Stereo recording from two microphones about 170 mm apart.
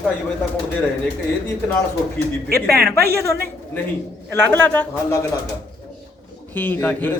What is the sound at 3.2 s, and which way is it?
A man's voice, 15° left (ahead or behind).